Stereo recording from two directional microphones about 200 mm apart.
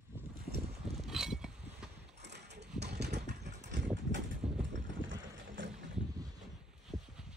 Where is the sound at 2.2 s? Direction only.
55° right (ahead or behind).